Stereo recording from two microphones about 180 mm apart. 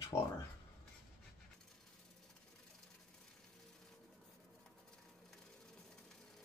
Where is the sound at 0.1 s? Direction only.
15° left (ahead or behind).